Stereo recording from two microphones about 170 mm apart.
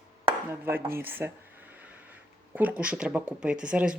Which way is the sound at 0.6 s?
15° right (ahead or behind).